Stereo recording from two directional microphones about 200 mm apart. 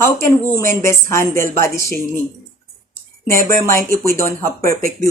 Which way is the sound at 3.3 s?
45° right (ahead or behind).